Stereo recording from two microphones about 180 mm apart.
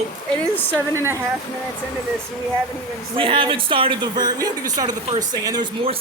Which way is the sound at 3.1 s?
30° right (ahead or behind).